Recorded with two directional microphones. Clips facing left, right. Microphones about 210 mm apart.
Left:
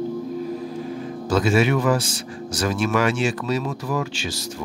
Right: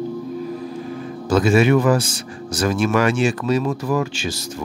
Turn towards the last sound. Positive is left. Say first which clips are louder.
# right 4 dB
turn(degrees=-50)  # may be behind; listen again after turning